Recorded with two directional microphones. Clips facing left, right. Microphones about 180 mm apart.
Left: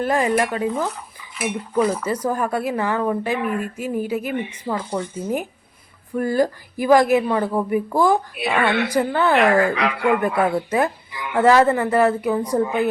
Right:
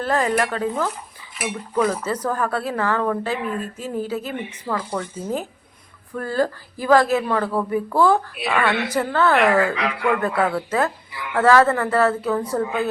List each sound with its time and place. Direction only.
0.0 s a woman's voice: 15° left (ahead or behind)